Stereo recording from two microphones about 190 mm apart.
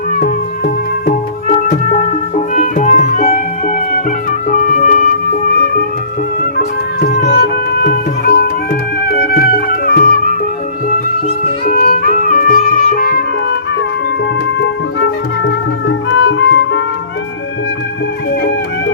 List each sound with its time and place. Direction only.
0.1 s music: 50° left (ahead or behind)
5.5 s music: 55° left (ahead or behind)
11.6 s music: 50° left (ahead or behind)
14.6 s music: 70° left (ahead or behind)